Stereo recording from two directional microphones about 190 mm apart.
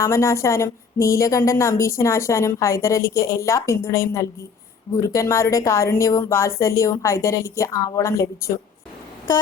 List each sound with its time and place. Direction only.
0.0 s speech: 15° left (ahead or behind)